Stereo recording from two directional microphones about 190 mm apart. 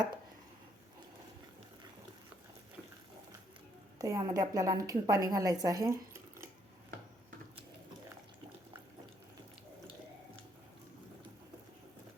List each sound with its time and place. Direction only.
3.9 s a woman's voice: 20° right (ahead or behind)